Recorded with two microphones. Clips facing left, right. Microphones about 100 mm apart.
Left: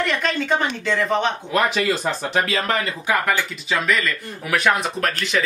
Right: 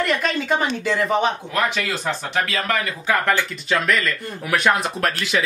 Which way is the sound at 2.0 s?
30° left (ahead or behind).